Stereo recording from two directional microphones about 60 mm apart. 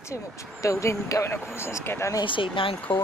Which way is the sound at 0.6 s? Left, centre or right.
Left.